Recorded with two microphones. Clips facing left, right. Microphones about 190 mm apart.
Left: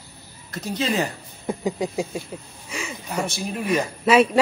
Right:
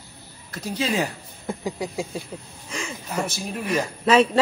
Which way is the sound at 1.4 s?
20° left (ahead or behind).